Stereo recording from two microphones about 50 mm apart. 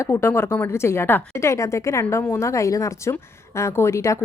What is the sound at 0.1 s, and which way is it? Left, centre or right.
Speech, left.